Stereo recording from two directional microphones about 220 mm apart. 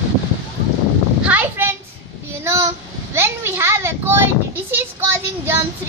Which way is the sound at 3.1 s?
10° right (ahead or behind).